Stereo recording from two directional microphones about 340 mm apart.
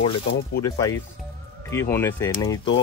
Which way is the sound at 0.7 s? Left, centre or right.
Centre.